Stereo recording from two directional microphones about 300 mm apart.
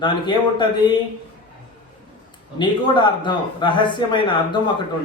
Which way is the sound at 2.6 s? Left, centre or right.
Centre.